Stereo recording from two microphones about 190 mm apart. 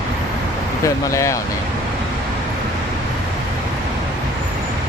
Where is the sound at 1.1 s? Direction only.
15° left (ahead or behind).